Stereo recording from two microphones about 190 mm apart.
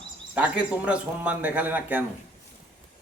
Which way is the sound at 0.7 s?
5° right (ahead or behind).